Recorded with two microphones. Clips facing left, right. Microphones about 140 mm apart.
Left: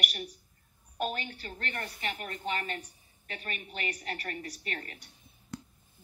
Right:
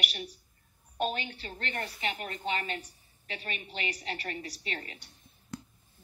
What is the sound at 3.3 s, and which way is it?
Speech, 45° left (ahead or behind).